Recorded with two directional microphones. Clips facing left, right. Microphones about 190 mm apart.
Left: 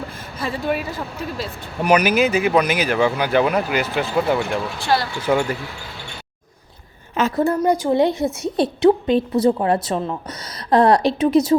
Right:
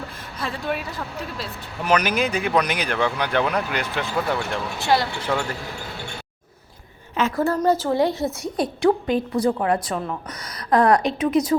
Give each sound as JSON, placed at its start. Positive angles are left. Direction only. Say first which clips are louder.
{"t": 0.3, "sound": "speech", "louder": "left 4 dB", "side_deg": 5}
{"t": 4.8, "sound": "speech", "louder": "right 1 dB", "side_deg": -20}
{"t": 5.3, "sound": "speech", "louder": "left 7 dB", "side_deg": 15}
{"t": 7.3, "sound": "a woman's voice", "louder": "left 2 dB", "side_deg": 15}